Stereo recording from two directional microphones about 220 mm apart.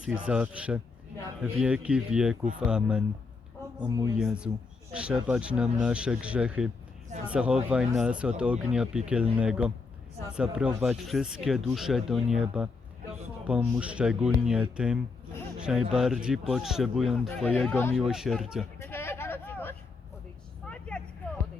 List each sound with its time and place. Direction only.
0.0 s speech: 5° right (ahead or behind)
3.8 s speech: 15° right (ahead or behind)
4.2 s speech: 5° right (ahead or behind)
18.0 s speech: centre (ahead or behind)
18.8 s vehicle: 10° left (ahead or behind)